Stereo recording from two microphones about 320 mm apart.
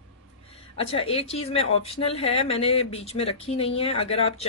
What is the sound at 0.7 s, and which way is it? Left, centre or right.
Speech, centre.